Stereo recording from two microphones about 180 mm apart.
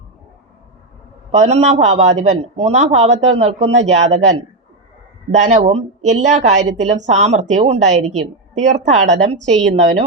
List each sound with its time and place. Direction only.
1.3 s a woman's voice: 40° right (ahead or behind)
9.4 s a woman's voice: centre (ahead or behind)
9.6 s a woman's voice: 45° right (ahead or behind)